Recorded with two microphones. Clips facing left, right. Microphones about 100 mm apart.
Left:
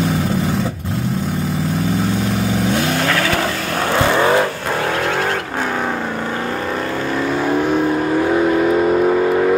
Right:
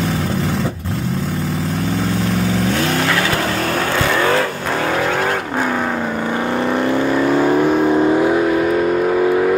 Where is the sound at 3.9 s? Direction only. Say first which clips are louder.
Left 3 dB; 25° left (ahead or behind).